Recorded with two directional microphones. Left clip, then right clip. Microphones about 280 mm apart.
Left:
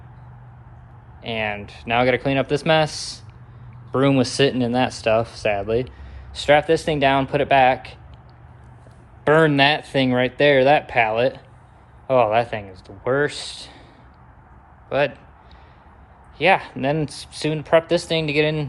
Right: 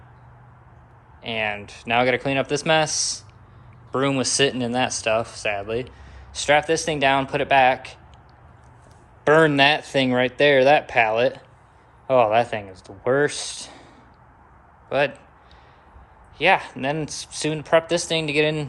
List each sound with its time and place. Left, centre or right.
1.2 s speech: centre
3.9 s speech: centre
9.2 s speech: centre
14.8 s a man's voice: centre
16.4 s speech: centre